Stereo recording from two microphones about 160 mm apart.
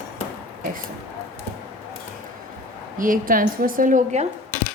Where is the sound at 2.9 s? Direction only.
60° right (ahead or behind).